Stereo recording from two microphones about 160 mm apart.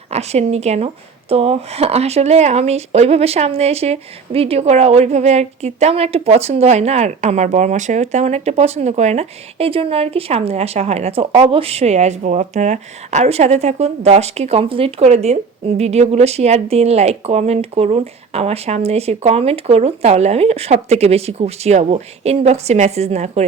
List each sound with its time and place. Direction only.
0.1 s speech: 40° right (ahead or behind)